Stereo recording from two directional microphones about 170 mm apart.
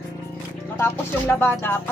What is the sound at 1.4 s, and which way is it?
Speech, 10° left (ahead or behind).